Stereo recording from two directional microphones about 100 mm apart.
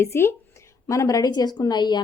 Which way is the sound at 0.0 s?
25° left (ahead or behind).